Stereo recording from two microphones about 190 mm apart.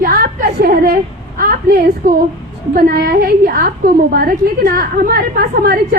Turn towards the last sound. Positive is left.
turn(degrees=-50)  # may be behind; listen again after turning